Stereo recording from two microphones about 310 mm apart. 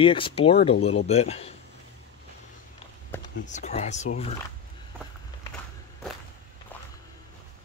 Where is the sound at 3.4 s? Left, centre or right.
Left.